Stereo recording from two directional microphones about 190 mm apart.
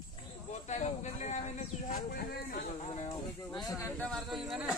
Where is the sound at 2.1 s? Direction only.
50° left (ahead or behind).